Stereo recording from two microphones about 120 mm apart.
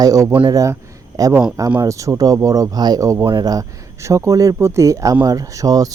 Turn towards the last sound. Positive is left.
turn(degrees=-30)  # may be behind; listen again after turning